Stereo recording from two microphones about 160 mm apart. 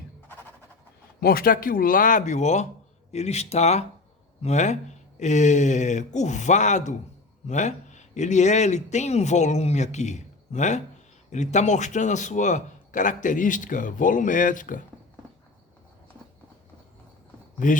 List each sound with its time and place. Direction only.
1.2 s a man's voice: 70° left (ahead or behind)
17.6 s speech: 55° left (ahead or behind)